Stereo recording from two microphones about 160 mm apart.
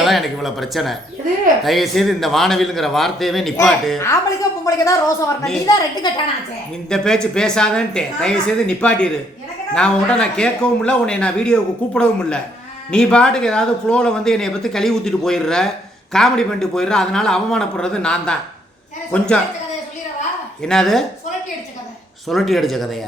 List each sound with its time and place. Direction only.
0.0 s speech: centre (ahead or behind)
4.6 s a woman's voice: 20° left (ahead or behind)
6.8 s speech: 5° left (ahead or behind)
20.6 s speech: 5° left (ahead or behind)
22.3 s speech: centre (ahead or behind)